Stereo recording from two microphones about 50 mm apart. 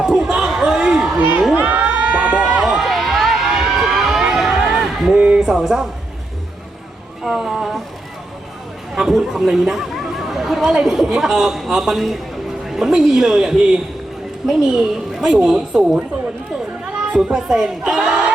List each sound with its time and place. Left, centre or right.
0.0 s a sound: centre
0.4 s a sound: centre
1.5 s crowd: right
2.4 s run: right
2.6 s run: centre
4.2 s crowd: centre
5.4 s a man's voice: centre
7.3 s a sound: centre
9.0 s a man's voice: centre
16.8 s children playing: centre
17.3 s a man's voice: centre